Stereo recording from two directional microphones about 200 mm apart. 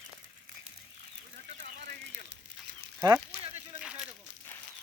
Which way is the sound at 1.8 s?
45° right (ahead or behind).